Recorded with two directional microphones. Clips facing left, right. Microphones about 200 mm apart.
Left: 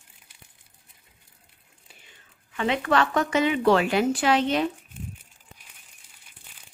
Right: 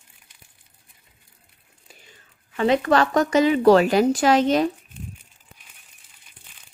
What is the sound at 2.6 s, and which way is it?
Speech, 40° right (ahead or behind).